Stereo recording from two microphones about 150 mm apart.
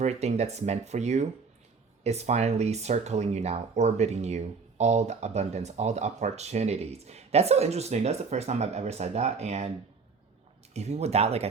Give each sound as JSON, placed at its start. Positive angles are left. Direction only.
{"t": 0.0, "sound": "speech", "side_deg": -50}
{"t": 10.8, "sound": "speech", "side_deg": -45}